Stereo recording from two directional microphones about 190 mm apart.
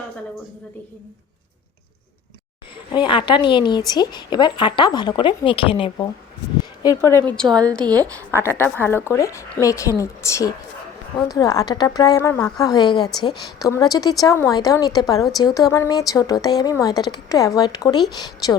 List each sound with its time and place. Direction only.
2.9 s a woman's voice: 25° left (ahead or behind)
6.8 s a woman's voice: 15° left (ahead or behind)